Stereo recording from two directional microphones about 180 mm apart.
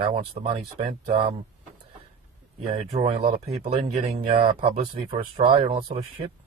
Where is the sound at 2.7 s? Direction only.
35° right (ahead or behind).